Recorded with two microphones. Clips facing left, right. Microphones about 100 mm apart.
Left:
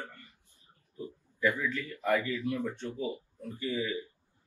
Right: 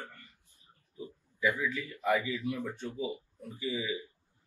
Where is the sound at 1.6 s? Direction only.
15° right (ahead or behind).